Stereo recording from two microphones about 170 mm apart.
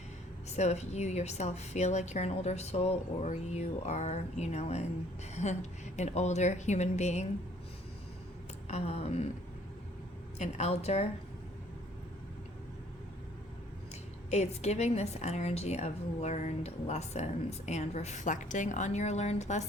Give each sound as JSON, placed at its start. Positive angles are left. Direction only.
{"t": 0.5, "sound": "a woman's voice", "side_deg": 40}
{"t": 8.6, "sound": "a woman's voice", "side_deg": 40}
{"t": 10.3, "sound": "a woman's voice", "side_deg": 40}
{"t": 14.3, "sound": "a woman's voice", "side_deg": 40}